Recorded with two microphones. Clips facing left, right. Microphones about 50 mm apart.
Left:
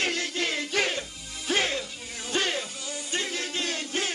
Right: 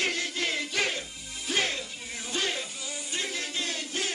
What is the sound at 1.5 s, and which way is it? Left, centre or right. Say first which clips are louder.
Music: left 3 dB; left.